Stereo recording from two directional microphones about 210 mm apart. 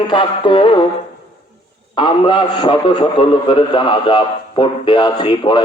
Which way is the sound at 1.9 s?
25° left (ahead or behind).